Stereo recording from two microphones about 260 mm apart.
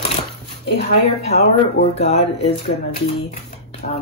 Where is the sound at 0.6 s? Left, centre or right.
Left.